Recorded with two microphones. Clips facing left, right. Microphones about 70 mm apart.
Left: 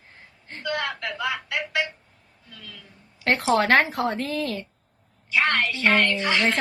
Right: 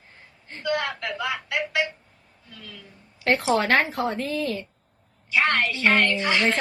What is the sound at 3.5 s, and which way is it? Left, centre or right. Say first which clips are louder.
Speech: left 2 dB; left.